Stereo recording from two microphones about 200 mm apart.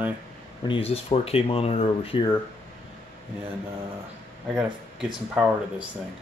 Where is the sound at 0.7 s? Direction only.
30° left (ahead or behind).